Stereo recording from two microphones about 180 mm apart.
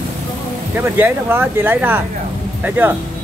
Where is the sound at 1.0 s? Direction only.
10° right (ahead or behind).